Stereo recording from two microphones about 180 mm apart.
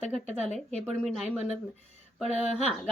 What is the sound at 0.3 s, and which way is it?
Speech, 40° left (ahead or behind).